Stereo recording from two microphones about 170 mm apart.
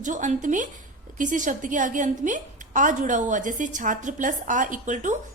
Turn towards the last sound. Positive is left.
turn(degrees=-45)  # may be behind; listen again after turning